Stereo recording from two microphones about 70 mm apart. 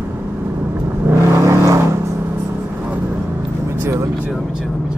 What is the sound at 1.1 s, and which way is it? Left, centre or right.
Vehicle, right.